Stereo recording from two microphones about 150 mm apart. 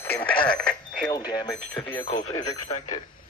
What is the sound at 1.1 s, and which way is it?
Speech, 25° left (ahead or behind).